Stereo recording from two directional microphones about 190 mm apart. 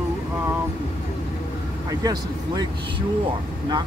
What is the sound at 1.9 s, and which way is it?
Speech, 20° right (ahead or behind).